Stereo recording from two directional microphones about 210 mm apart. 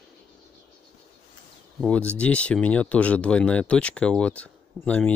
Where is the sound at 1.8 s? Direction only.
5° left (ahead or behind).